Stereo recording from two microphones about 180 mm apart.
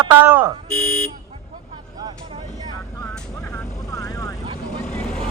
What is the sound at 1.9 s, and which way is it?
Vehicle, 20° right (ahead or behind).